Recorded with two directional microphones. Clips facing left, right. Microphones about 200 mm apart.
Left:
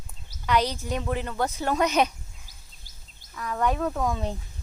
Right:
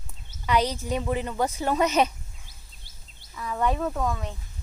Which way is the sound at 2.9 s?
45° left (ahead or behind).